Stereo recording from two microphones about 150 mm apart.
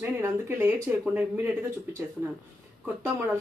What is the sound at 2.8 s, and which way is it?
Speech, 15° right (ahead or behind).